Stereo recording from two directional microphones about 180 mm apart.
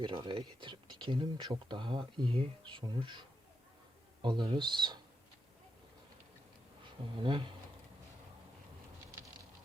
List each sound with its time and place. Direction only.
0.0 s speech: 30° right (ahead or behind)
6.8 s speech: 30° right (ahead or behind)